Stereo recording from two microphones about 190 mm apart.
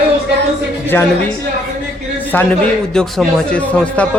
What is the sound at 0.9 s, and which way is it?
Speech, 10° left (ahead or behind).